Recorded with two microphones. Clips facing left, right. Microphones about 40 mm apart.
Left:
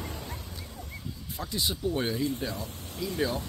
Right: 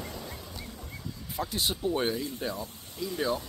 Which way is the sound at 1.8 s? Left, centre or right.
Centre.